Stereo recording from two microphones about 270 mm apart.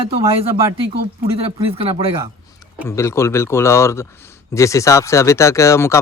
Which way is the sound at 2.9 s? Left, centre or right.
Centre.